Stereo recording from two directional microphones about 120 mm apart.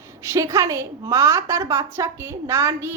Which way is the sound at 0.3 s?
25° right (ahead or behind).